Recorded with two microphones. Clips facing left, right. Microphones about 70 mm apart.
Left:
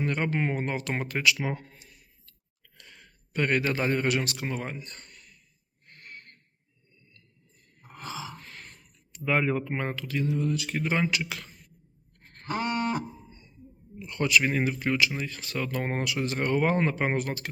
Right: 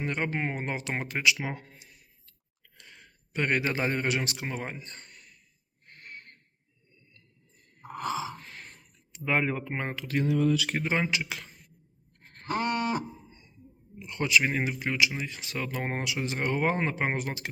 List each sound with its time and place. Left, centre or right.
0.0 s speech: centre
1.5 s a sound: centre
2.8 s a man's voice: centre
6.1 s a sound: centre
8.0 s gasp: right
8.4 s a sound: centre
10.2 s speech: right
10.8 s speech: centre
12.4 s livestock: centre
14.0 s speech: centre